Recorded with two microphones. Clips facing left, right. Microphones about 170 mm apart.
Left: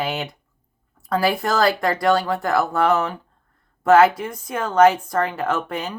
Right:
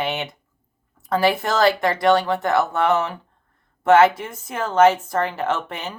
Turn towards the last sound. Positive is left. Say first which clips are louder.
# left 1 dB
turn(degrees=-25)  # may be behind; listen again after turning